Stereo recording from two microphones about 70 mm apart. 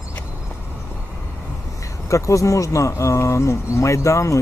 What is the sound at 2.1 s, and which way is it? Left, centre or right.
Speech, left.